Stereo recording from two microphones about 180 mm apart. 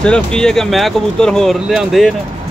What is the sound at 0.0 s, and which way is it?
Speech, 5° left (ahead or behind).